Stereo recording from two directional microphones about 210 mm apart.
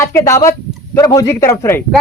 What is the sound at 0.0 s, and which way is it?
Speech, 15° left (ahead or behind).